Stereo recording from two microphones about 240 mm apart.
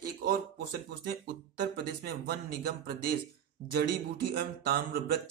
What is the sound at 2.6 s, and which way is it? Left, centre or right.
Speech, right.